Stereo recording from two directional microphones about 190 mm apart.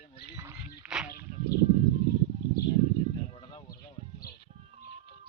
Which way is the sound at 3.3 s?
25° left (ahead or behind).